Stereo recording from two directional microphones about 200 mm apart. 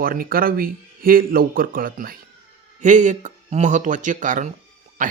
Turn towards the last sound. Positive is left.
turn(degrees=-40)  # may be behind; listen again after turning